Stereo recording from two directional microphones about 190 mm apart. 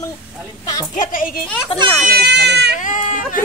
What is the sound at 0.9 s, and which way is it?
Speech, 45° left (ahead or behind).